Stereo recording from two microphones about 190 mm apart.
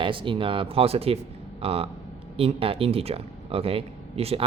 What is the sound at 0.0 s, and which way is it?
Speech, 25° right (ahead or behind).